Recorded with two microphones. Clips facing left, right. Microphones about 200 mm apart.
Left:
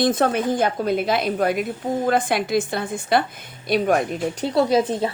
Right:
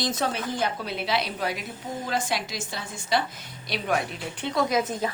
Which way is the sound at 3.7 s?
45° left (ahead or behind).